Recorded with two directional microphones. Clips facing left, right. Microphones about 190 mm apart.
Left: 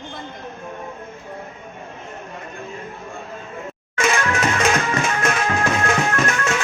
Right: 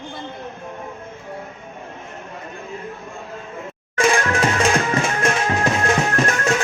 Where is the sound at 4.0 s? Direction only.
30° right (ahead or behind).